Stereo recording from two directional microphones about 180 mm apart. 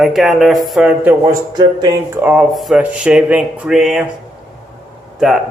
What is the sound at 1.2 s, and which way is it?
Speech, 20° right (ahead or behind).